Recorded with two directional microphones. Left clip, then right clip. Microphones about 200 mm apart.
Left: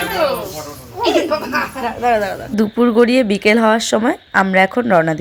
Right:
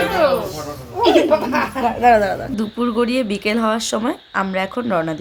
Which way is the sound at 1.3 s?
10° right (ahead or behind).